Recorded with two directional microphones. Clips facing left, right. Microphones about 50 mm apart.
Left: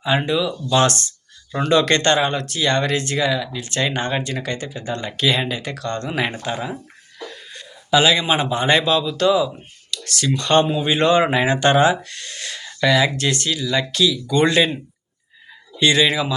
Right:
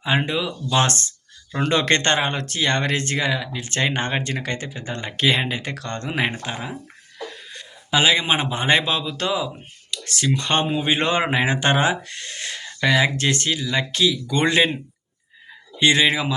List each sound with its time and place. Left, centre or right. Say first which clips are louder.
0.0 s speech: left 3 dB; right
6.4 s speech: left 4 dB; centre
7.9 s speech: left 2 dB; right
15.8 s speech: left 1 dB; right